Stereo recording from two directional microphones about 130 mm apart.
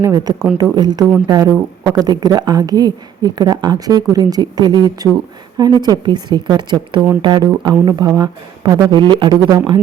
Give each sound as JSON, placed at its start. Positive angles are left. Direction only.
{"t": 0.0, "sound": "a woman's voice", "side_deg": -30}